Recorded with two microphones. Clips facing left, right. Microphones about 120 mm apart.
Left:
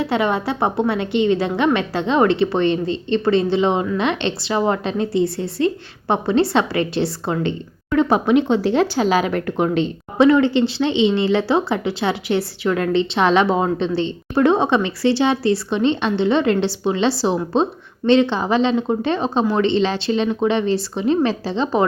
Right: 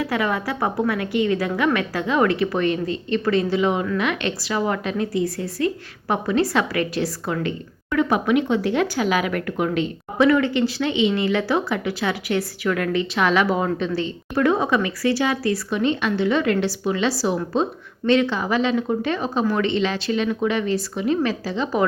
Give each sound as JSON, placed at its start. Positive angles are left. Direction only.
{"t": 0.0, "sound": "a woman's voice", "side_deg": 25}